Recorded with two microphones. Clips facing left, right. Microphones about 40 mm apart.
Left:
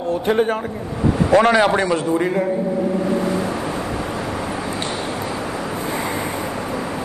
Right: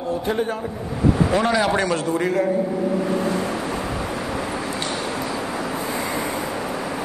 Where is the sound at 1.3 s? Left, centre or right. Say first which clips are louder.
Left 6 dB; left.